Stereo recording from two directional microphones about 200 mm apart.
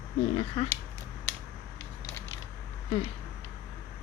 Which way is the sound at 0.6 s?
30° left (ahead or behind).